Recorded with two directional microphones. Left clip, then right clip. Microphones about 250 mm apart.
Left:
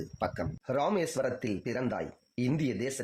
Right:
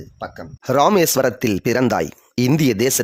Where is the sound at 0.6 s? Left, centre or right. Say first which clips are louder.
Right 16 dB; right.